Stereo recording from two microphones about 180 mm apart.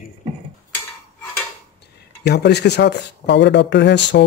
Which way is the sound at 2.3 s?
65° left (ahead or behind).